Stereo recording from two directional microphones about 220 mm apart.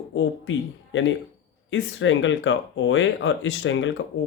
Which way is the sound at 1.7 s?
60° left (ahead or behind).